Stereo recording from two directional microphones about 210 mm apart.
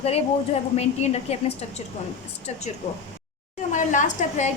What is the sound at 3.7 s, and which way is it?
Speech, 35° left (ahead or behind).